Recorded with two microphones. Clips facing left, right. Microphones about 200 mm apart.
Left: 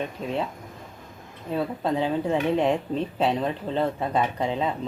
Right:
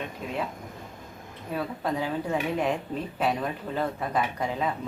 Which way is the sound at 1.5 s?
25° left (ahead or behind).